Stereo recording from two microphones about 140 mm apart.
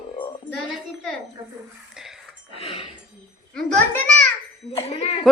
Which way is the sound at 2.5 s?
40° left (ahead or behind).